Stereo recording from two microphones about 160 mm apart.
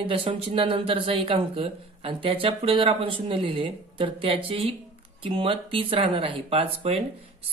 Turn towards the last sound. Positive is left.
turn(degrees=-35)  # may be behind; listen again after turning